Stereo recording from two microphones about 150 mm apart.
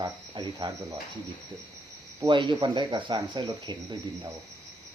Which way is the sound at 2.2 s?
30° right (ahead or behind).